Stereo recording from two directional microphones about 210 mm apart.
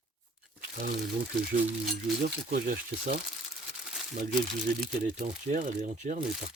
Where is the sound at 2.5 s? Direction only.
45° right (ahead or behind).